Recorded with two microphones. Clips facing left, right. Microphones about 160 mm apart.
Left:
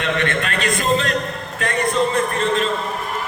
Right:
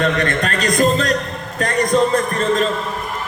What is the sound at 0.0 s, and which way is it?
A man's voice, 40° right (ahead or behind).